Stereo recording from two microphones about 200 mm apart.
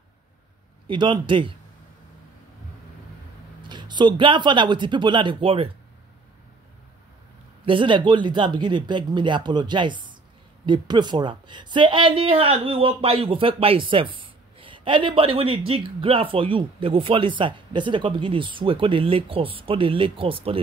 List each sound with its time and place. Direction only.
0.8 s speech: 25° right (ahead or behind)
3.6 s speech: 20° right (ahead or behind)
7.6 s speech: 25° right (ahead or behind)